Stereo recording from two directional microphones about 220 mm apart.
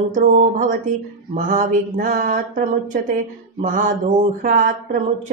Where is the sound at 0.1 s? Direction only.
35° right (ahead or behind).